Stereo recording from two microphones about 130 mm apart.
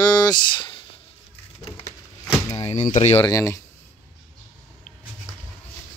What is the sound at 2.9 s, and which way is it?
Speech, 60° left (ahead or behind).